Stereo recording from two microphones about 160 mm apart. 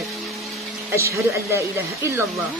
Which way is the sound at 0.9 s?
15° right (ahead or behind).